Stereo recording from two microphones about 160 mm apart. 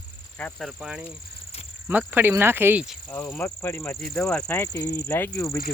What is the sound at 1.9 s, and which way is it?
Cricket, 10° right (ahead or behind).